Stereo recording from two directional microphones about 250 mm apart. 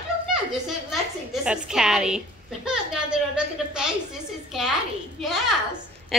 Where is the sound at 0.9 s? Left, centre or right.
Centre.